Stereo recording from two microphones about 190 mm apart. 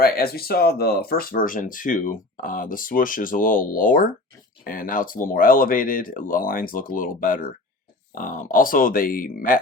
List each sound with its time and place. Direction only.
0.0 s speech: 55° left (ahead or behind)